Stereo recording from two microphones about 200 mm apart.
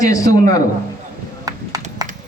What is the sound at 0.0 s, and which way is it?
Speech, 15° left (ahead or behind).